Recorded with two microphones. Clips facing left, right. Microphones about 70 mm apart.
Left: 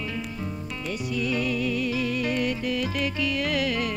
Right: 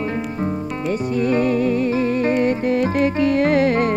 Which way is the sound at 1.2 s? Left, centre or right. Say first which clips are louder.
Right 9 dB; right.